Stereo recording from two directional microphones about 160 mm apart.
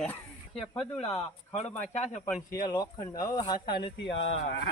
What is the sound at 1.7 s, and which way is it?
Speech, 10° left (ahead or behind).